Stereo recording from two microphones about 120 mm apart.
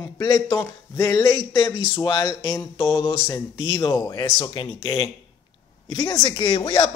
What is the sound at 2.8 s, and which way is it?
Speech, 45° left (ahead or behind).